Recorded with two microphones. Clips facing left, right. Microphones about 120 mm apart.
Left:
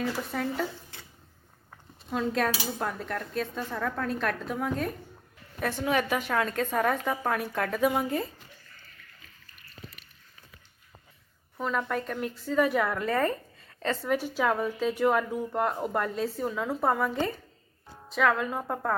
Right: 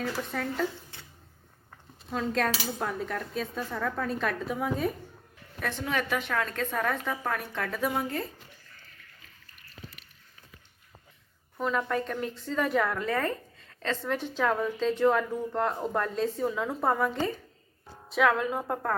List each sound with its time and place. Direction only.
0.0 s a woman's voice: 5° left (ahead or behind)
2.0 s a woman's voice: centre (ahead or behind); by 7.3 s 20° left (ahead or behind)
7.3 s a woman's voice: 5° left (ahead or behind)
11.5 s a woman's voice: centre (ahead or behind)